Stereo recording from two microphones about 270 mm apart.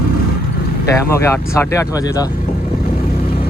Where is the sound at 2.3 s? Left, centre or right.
Left.